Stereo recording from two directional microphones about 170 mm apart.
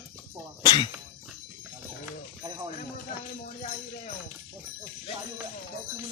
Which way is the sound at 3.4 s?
45° left (ahead or behind).